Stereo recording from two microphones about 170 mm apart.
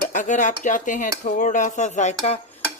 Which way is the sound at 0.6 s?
50° left (ahead or behind).